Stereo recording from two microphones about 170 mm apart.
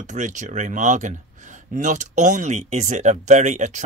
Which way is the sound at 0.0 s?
45° right (ahead or behind).